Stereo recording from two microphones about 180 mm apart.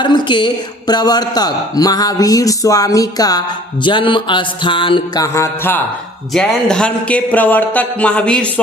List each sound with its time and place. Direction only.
0.0 s a man's voice: 25° left (ahead or behind); by 8.4 s 5° left (ahead or behind)